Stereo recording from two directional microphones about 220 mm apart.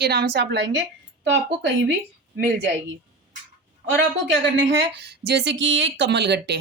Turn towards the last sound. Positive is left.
turn(degrees=-50)  # may be behind; listen again after turning